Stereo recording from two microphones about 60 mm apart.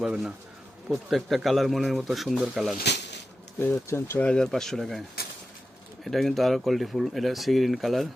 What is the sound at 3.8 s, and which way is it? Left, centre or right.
Speech, left.